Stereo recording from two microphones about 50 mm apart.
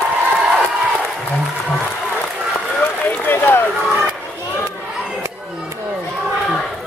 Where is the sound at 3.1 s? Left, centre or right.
Left.